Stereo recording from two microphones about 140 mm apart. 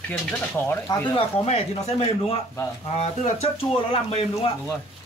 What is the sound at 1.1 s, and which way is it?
Speech, 45° left (ahead or behind).